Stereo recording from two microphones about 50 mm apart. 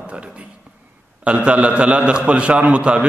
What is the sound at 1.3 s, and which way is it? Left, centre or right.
A man's voice, right.